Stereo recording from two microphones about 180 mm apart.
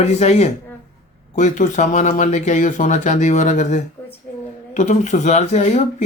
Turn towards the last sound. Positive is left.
turn(degrees=40)  # may be behind; listen again after turning